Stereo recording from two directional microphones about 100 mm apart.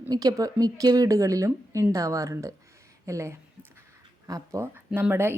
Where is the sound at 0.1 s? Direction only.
40° right (ahead or behind).